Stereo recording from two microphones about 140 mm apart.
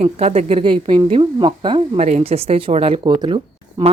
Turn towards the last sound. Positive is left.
turn(degrees=-35)  # may be behind; listen again after turning